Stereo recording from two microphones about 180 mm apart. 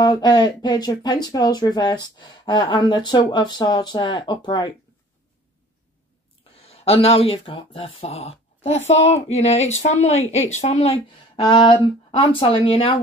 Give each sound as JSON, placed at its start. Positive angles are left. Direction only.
{"t": 0.0, "sound": "speech", "side_deg": 25}
{"t": 6.6, "sound": "speech", "side_deg": 35}